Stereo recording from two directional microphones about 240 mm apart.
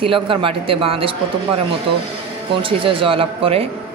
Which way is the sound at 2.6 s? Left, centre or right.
Right.